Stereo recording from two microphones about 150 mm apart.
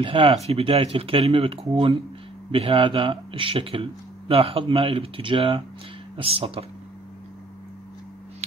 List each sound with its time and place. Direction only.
0.0 s speech: 40° right (ahead or behind)